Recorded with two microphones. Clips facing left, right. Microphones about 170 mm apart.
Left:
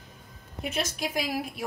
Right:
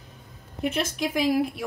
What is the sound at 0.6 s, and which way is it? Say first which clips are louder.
Speech: right 5 dB; 55° right (ahead or behind).